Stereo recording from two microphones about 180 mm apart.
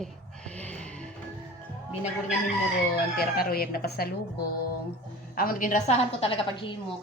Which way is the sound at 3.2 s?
55° left (ahead or behind).